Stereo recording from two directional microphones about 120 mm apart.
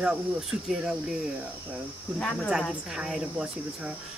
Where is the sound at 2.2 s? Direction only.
10° left (ahead or behind).